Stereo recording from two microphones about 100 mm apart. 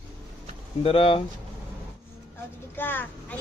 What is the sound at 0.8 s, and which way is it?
Speech, 70° left (ahead or behind).